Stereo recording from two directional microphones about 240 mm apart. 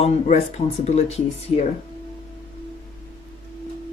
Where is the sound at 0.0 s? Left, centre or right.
Left.